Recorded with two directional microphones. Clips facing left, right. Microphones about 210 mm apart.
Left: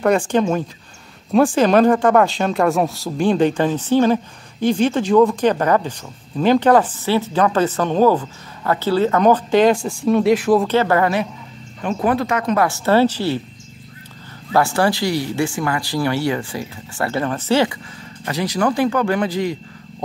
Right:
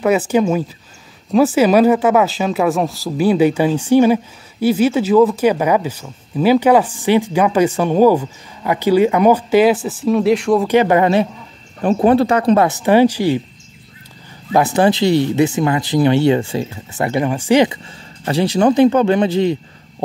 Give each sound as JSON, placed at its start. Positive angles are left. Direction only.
{"t": 0.0, "sound": "speech", "side_deg": -5}
{"t": 10.7, "sound": "speech", "side_deg": -15}
{"t": 12.6, "sound": "speech", "side_deg": -15}
{"t": 14.5, "sound": "speech", "side_deg": -20}
{"t": 18.2, "sound": "speech", "side_deg": -30}